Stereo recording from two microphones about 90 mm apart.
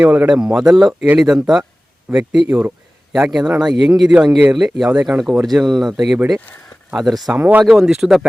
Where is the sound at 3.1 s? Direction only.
5° right (ahead or behind).